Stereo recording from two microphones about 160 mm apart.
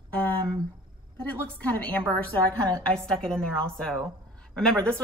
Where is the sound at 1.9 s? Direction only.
10° left (ahead or behind).